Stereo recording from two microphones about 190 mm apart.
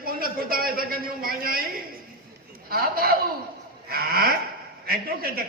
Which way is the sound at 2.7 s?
50° right (ahead or behind).